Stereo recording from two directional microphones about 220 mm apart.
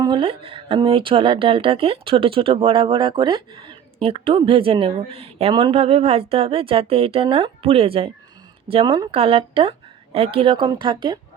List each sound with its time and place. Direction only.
0.0 s speech: 20° right (ahead or behind)